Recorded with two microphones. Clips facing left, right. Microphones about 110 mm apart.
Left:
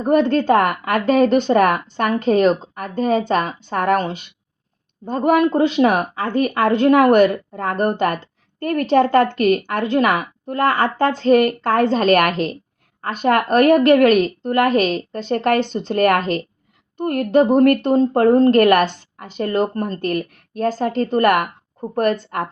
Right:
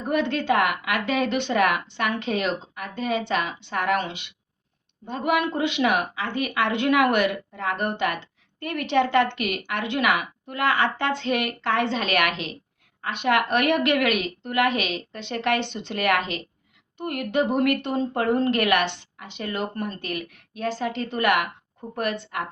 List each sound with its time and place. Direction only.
0.0 s a woman's voice: 40° left (ahead or behind)